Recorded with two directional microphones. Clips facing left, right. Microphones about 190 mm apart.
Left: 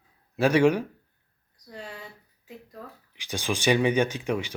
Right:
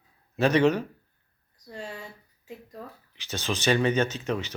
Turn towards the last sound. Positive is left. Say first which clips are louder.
# left 1 dB
turn(degrees=10)  # may be behind; listen again after turning